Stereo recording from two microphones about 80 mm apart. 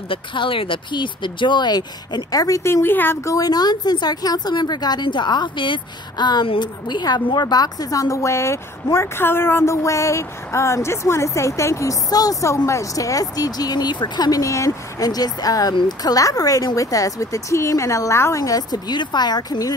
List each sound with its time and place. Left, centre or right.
0.1 s speech: left
2.6 s a woman's voice: left
3.3 s speech: left
18.4 s speech: left